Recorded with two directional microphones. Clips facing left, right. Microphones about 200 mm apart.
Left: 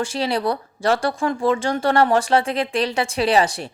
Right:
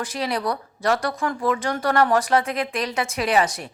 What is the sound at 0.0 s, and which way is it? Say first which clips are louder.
Speech: left 4 dB; 30° left (ahead or behind).